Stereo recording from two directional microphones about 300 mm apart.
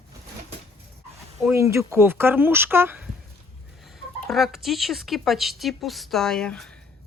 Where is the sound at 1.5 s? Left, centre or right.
Centre.